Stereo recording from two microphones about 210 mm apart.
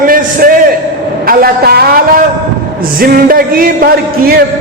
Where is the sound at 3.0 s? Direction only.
45° right (ahead or behind).